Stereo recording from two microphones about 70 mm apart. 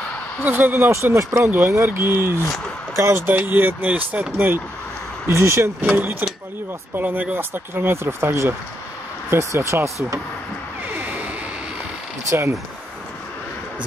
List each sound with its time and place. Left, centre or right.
0.4 s speech: right
5.3 s speech: right
5.8 s speech: right
9.3 s speech: right
11.0 s a sound: right
12.3 s speech: right